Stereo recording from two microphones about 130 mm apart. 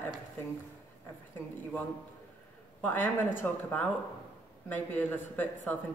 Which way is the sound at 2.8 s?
15° left (ahead or behind).